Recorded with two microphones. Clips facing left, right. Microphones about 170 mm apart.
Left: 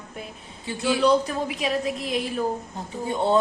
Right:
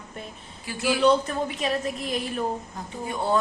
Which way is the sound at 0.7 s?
25° left (ahead or behind).